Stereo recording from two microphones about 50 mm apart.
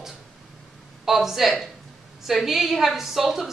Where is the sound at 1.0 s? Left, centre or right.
Centre.